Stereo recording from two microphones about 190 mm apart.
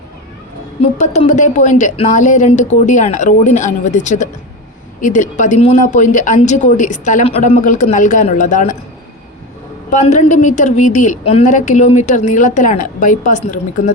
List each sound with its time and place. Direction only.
0.8 s a woman's voice: 35° left (ahead or behind)
9.9 s a woman's voice: 40° left (ahead or behind)